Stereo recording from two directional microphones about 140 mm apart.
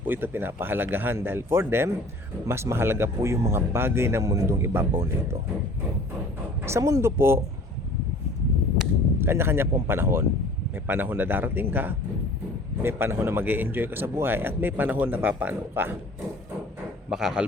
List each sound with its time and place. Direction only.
0.0 s speech: 15° right (ahead or behind)
6.7 s speech: 20° right (ahead or behind)
9.1 s speech: 15° right (ahead or behind)
17.1 s a man's voice: 5° right (ahead or behind)